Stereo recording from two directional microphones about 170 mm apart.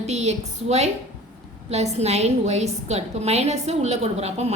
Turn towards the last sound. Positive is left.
turn(degrees=-40)  # may be behind; listen again after turning